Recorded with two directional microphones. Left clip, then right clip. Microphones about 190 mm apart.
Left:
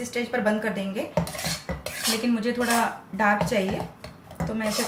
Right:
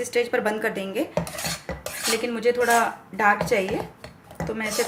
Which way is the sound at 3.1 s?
55° right (ahead or behind).